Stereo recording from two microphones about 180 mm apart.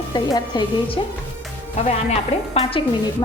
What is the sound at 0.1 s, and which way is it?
Speech, 25° left (ahead or behind).